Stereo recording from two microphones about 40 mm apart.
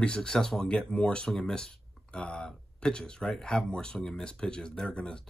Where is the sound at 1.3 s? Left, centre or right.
Centre.